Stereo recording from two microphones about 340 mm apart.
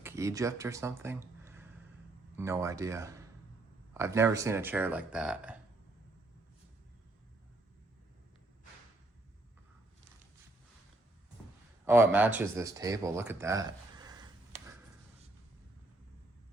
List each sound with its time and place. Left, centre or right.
0.0 s speech: centre
11.9 s speech: centre